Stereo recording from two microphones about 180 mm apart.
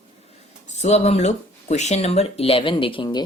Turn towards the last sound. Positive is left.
turn(degrees=25)  # may be behind; listen again after turning